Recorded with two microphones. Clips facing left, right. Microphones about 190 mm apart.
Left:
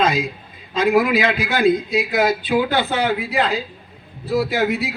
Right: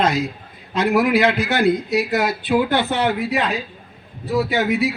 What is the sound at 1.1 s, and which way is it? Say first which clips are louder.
Speech: right 2 dB; 90° left.